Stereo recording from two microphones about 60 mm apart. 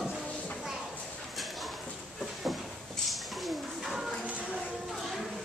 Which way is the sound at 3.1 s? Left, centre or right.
Centre.